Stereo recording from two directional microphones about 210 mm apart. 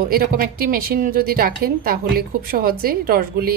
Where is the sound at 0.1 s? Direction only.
45° right (ahead or behind).